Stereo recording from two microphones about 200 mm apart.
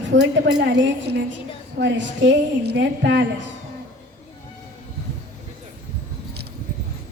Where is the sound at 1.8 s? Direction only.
65° right (ahead or behind).